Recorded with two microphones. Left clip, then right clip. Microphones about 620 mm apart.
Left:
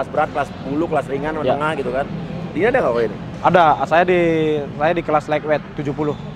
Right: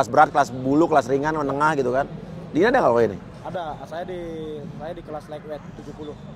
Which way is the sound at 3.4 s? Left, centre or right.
Left.